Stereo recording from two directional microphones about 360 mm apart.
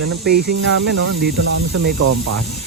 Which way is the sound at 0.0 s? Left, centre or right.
Right.